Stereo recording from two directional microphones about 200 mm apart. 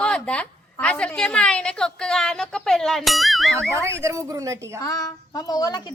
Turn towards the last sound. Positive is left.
turn(degrees=20)  # may be behind; listen again after turning